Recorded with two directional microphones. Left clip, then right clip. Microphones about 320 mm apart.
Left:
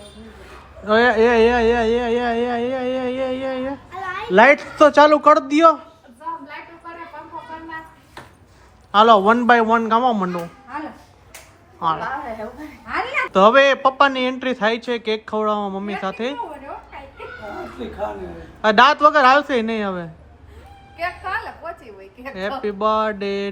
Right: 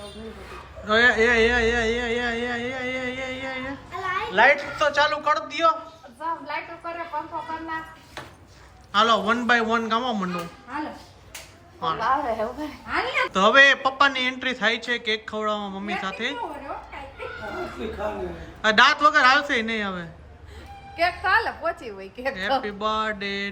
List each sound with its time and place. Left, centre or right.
0.9 s a sound: centre
4.3 s a man's voice: centre
8.9 s speech: centre
12.9 s speech: centre
18.6 s a man's voice: centre
20.9 s a woman's voice: right
22.6 s speech: centre